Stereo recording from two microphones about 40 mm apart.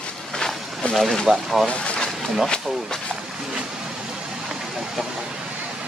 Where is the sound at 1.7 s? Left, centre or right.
Left.